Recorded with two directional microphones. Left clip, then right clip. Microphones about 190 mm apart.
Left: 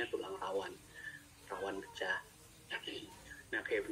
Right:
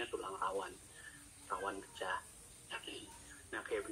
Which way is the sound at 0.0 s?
15° left (ahead or behind).